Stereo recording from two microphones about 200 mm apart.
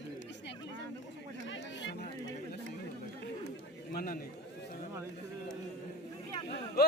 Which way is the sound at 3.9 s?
45° left (ahead or behind).